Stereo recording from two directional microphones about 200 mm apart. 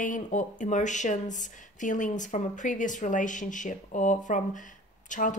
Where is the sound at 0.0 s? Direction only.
40° left (ahead or behind).